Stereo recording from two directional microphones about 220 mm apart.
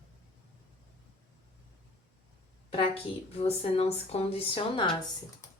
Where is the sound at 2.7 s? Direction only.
25° left (ahead or behind).